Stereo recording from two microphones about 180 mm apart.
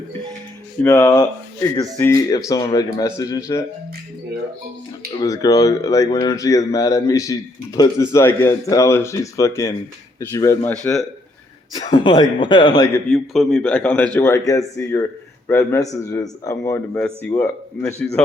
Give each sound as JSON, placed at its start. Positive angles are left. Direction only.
{"t": 0.8, "sound": "speech", "side_deg": 15}
{"t": 5.2, "sound": "speech", "side_deg": 20}
{"t": 11.9, "sound": "speech", "side_deg": 25}
{"t": 13.1, "sound": "a man's voice", "side_deg": 0}